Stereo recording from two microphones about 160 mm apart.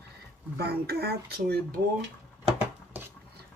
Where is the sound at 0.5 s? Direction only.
85° right.